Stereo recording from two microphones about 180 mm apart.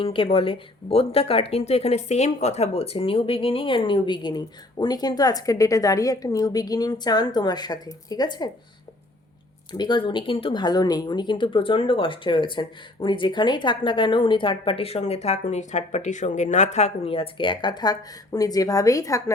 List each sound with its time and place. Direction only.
0.0 s speech: 30° left (ahead or behind)
9.7 s speech: 25° left (ahead or behind)